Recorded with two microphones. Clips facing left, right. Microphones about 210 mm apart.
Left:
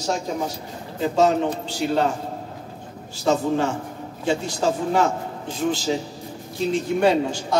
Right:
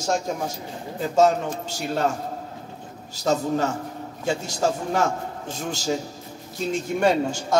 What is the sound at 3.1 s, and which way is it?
A man's voice, 40° right (ahead or behind).